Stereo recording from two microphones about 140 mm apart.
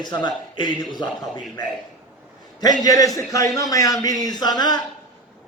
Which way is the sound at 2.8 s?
25° left (ahead or behind).